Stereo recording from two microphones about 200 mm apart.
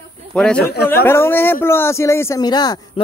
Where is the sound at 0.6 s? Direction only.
55° left (ahead or behind).